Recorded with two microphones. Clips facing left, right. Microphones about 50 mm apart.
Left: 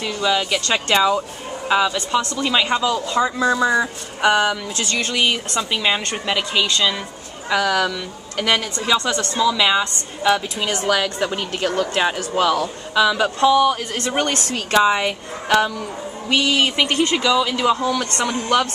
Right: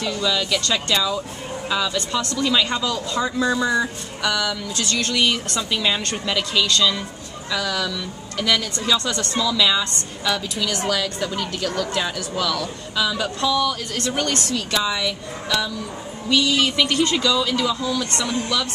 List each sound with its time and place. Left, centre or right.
0.1 s a woman's voice: left
1.7 s a woman's voice: left
4.2 s a woman's voice: left
8.7 s a woman's voice: left